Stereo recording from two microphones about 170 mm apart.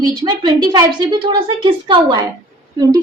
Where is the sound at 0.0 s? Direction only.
25° right (ahead or behind).